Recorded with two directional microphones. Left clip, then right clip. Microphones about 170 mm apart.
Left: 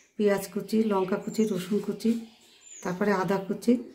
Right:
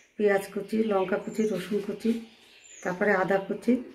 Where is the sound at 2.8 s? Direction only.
60° left (ahead or behind).